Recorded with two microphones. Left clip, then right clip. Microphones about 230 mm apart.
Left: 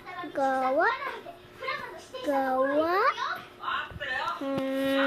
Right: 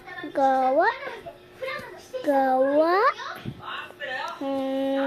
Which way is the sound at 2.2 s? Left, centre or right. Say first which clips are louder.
Right 5 dB; centre.